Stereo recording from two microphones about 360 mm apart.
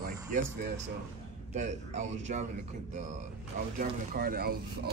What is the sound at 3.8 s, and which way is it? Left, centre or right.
Speech, right.